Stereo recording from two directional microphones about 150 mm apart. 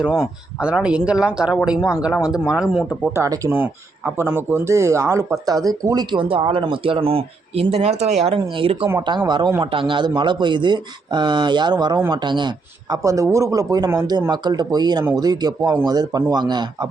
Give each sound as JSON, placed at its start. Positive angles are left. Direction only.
{"t": 0.0, "sound": "speech", "side_deg": 0}
{"t": 3.1, "sound": "speech", "side_deg": -20}